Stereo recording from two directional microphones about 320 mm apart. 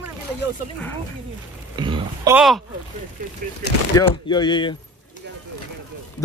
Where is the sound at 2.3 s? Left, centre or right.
Centre.